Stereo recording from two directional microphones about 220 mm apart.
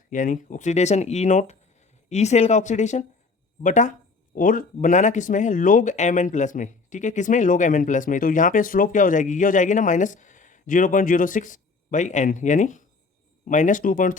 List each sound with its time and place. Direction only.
0.1 s speech: 35° left (ahead or behind)